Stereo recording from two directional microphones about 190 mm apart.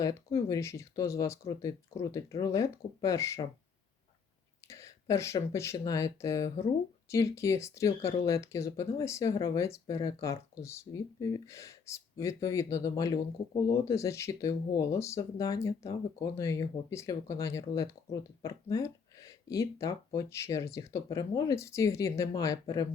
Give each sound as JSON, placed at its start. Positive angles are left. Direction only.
{"t": 0.0, "sound": "speech", "side_deg": 15}
{"t": 4.7, "sound": "speech", "side_deg": 15}